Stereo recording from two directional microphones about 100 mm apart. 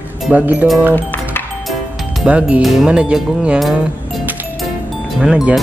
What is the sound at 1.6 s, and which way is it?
Music, centre (ahead or behind).